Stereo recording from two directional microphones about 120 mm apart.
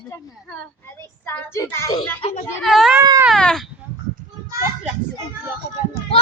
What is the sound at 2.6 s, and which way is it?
Speech, centre (ahead or behind).